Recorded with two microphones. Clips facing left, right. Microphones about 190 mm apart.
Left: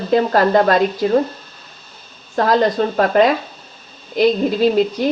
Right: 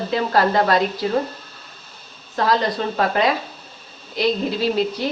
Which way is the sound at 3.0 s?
50° left (ahead or behind).